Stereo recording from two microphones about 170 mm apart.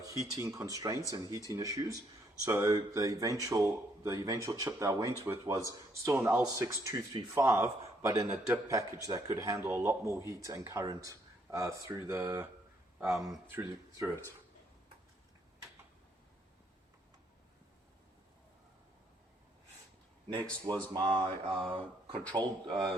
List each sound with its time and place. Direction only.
0.0 s speech: 20° right (ahead or behind)
13.5 s speech: 15° right (ahead or behind)
20.9 s a sound: 30° right (ahead or behind)
21.5 s speech: 5° right (ahead or behind)
22.2 s speech: 10° left (ahead or behind)
22.6 s speech: 25° right (ahead or behind)